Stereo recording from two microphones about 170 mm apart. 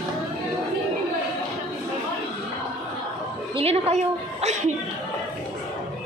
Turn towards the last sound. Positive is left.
turn(degrees=-45)  # may be behind; listen again after turning